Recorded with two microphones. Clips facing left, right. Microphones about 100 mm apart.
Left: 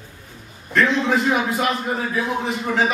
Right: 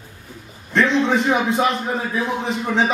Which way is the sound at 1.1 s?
25° right (ahead or behind).